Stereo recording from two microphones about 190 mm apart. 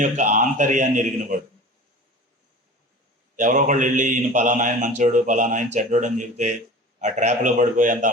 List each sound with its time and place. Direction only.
0.0 s a man's voice: 40° right (ahead or behind)
3.3 s a man's voice: 40° right (ahead or behind)